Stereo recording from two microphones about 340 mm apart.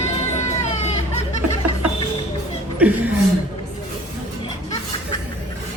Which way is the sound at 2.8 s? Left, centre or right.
Centre.